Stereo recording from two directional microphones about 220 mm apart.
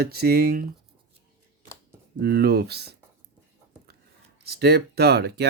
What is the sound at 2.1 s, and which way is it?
Speech, 45° right (ahead or behind).